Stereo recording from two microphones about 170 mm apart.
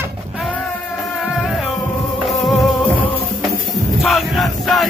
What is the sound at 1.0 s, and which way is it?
Music, centre (ahead or behind).